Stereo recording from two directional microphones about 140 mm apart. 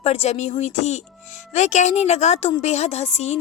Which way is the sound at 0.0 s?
45° left (ahead or behind).